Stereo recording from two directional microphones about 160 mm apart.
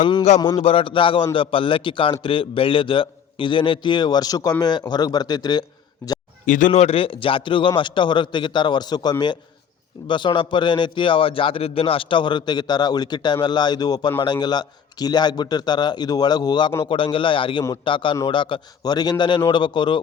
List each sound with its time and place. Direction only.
0.0 s speech: 25° left (ahead or behind)
0.6 s a man's voice: 35° left (ahead or behind)
6.4 s a man's voice: 55° left (ahead or behind); by 20.0 s 30° left (ahead or behind)